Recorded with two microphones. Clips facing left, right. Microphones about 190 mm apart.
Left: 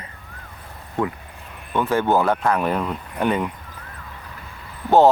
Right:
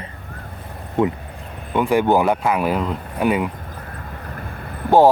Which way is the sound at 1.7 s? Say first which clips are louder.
Right 3 dB; 15° right (ahead or behind).